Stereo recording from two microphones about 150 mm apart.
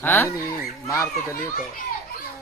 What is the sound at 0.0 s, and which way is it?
A child's voice, 15° left (ahead or behind).